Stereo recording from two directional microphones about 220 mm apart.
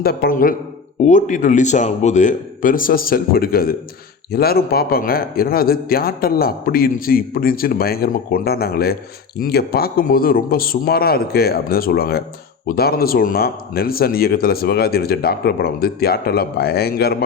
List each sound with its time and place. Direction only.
0.0 s a man's voice: 45° left (ahead or behind)